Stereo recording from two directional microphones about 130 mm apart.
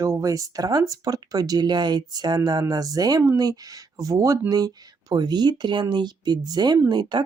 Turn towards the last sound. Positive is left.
turn(degrees=-35)  # may be behind; listen again after turning